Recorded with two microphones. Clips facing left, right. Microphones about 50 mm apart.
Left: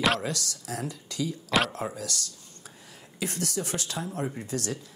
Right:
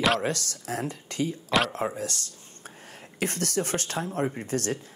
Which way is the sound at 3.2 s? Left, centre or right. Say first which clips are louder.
Right 3 dB; right.